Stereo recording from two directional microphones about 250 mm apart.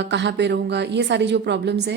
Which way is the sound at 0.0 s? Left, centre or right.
Right.